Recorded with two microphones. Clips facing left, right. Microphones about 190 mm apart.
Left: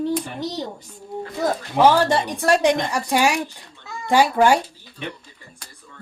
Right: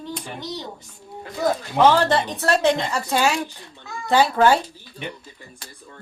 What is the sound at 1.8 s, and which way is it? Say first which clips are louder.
Speech: left 1 dB; 10° left (ahead or behind).